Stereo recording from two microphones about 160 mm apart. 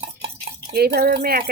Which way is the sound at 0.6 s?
75° right (ahead or behind).